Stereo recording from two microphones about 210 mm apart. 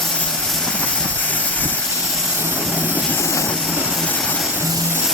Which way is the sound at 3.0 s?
15° left (ahead or behind).